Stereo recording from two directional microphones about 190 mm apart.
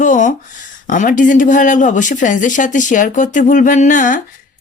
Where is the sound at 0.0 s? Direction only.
40° left (ahead or behind).